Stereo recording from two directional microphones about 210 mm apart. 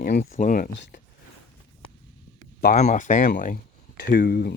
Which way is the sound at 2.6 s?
35° left (ahead or behind).